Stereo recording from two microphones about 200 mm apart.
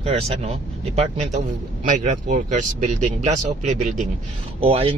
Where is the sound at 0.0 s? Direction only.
30° right (ahead or behind).